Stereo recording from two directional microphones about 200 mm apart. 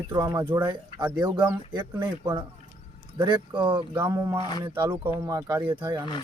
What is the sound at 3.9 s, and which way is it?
Speech, 10° right (ahead or behind).